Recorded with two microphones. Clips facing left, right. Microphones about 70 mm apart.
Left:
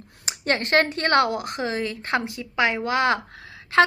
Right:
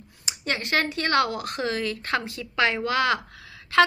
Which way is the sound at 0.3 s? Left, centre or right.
Left.